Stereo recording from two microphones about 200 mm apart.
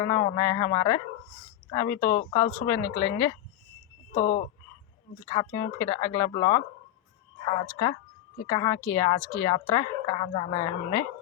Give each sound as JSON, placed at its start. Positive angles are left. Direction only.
{"t": 0.0, "sound": "a woman's voice", "side_deg": 20}
{"t": 4.1, "sound": "speech", "side_deg": 40}
{"t": 5.2, "sound": "a woman's voice", "side_deg": 20}
{"t": 7.7, "sound": "a woman's voice", "side_deg": 15}